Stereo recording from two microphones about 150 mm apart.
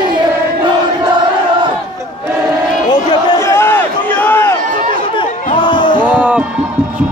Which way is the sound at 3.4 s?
15° left (ahead or behind).